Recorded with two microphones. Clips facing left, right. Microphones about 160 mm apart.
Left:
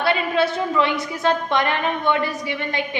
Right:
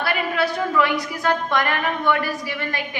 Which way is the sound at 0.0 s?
25° left (ahead or behind).